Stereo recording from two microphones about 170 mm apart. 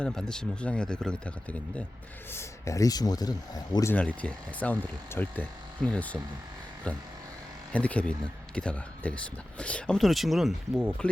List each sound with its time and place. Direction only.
0.0 s speech: 5° left (ahead or behind); by 3.9 s 20° left (ahead or behind)
3.9 s speech: 5° left (ahead or behind)
7.7 s speech: 10° left (ahead or behind)